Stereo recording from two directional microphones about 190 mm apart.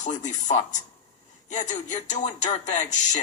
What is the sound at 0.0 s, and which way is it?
A woman's voice, 40° left (ahead or behind).